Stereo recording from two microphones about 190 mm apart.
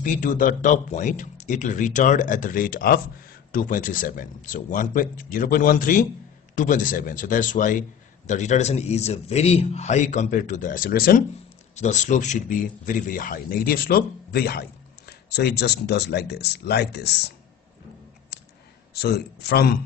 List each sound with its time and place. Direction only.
0.0 s a man's voice: 45° left (ahead or behind)
11.7 s a man's voice: 40° left (ahead or behind); by 17.3 s 60° left (ahead or behind)
18.9 s a man's voice: 55° left (ahead or behind)